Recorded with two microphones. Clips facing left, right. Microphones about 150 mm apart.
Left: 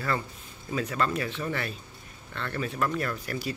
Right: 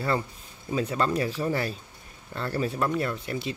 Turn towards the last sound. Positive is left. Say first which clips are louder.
# right 2 dB
turn(degrees=-25)  # may be behind; listen again after turning